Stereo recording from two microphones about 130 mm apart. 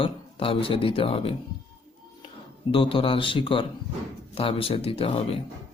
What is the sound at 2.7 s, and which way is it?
Speech, 45° left (ahead or behind).